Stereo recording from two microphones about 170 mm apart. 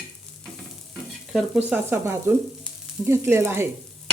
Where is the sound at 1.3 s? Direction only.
Centre (ahead or behind).